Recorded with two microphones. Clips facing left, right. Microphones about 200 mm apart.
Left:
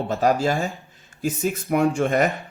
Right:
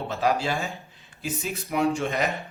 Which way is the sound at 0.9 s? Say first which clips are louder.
Left 9 dB; 45° left (ahead or behind).